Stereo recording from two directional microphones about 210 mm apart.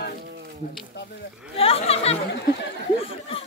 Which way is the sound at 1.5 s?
30° left (ahead or behind).